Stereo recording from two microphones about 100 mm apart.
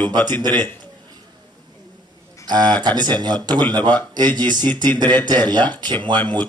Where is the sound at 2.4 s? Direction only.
45° right (ahead or behind).